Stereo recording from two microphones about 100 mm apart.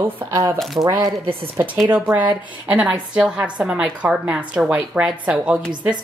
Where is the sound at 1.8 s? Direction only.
20° right (ahead or behind).